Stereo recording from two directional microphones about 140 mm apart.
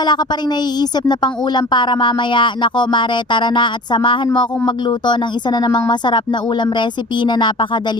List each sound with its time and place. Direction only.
0.0 s speech: 30° left (ahead or behind)